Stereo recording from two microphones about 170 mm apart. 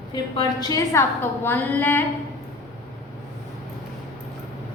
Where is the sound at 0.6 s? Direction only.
20° left (ahead or behind).